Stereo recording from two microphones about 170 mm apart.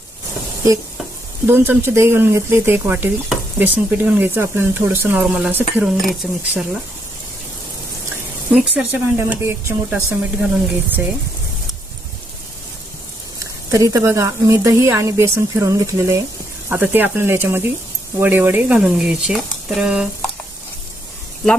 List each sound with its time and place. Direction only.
1.5 s speech: 10° right (ahead or behind)
8.5 s speech: 10° right (ahead or behind)
13.4 s speech: 20° right (ahead or behind)